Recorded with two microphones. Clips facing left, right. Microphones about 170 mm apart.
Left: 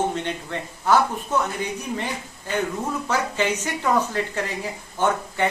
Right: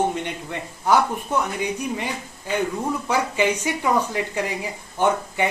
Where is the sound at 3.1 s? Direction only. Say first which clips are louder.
Right 2 dB; 10° right (ahead or behind).